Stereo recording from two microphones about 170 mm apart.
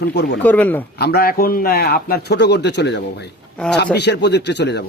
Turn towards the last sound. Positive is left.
turn(degrees=90)